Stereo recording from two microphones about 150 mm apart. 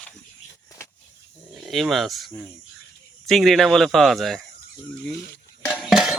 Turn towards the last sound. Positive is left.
turn(degrees=0)  # may be behind; listen again after turning